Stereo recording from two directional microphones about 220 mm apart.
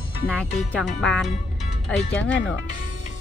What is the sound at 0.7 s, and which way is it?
Speech, 5° left (ahead or behind).